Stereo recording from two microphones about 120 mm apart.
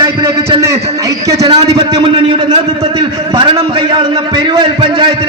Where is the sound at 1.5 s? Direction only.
40° right (ahead or behind).